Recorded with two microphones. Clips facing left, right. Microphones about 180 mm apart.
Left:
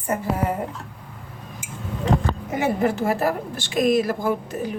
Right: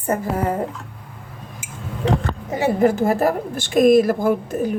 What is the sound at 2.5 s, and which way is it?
A woman's voice, 35° right (ahead or behind).